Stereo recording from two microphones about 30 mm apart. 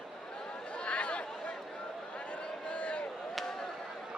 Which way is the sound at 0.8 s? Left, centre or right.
Left.